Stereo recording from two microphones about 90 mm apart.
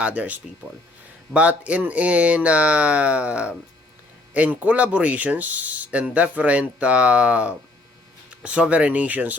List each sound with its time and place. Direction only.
0.0 s speech: 15° right (ahead or behind)